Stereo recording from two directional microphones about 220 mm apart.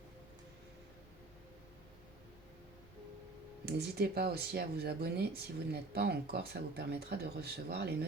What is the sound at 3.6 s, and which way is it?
Speech, 45° right (ahead or behind).